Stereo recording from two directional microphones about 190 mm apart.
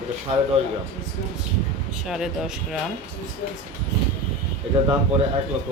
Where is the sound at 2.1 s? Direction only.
Centre (ahead or behind).